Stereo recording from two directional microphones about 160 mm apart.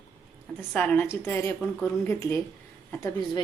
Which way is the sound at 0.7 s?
10° left (ahead or behind).